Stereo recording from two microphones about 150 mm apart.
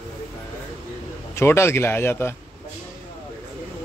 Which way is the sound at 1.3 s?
20° left (ahead or behind).